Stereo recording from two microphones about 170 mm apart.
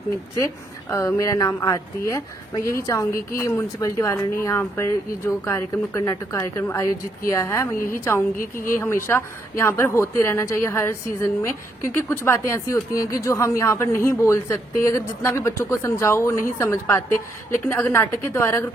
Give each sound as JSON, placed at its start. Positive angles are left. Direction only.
{"t": 0.3, "sound": "speech", "side_deg": 15}